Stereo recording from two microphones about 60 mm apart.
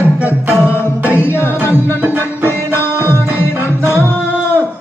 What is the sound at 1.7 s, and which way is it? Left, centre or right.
Music, right.